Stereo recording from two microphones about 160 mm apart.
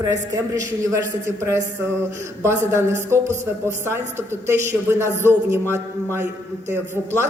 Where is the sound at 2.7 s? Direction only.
15° right (ahead or behind).